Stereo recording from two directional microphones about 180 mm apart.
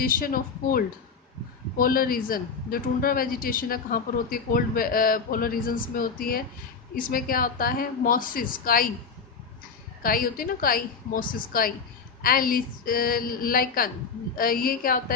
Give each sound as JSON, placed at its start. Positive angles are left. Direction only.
{"t": 0.0, "sound": "a man's voice", "side_deg": 50}
{"t": 10.0, "sound": "a man's voice", "side_deg": 55}